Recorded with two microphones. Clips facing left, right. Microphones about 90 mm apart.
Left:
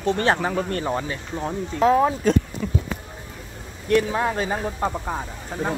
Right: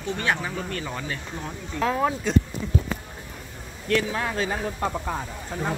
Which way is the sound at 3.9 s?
25° left (ahead or behind).